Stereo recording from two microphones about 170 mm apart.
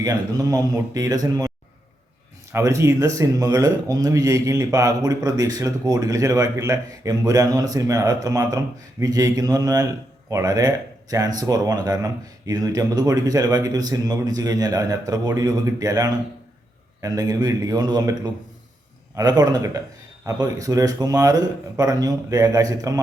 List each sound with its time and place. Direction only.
0.0 s speech: 20° right (ahead or behind)
2.5 s speech: 15° right (ahead or behind)